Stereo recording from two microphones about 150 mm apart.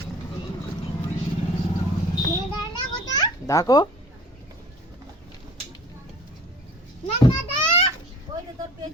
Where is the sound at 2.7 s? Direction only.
25° left (ahead or behind).